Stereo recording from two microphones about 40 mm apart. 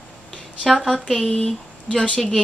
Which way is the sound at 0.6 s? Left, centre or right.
Centre.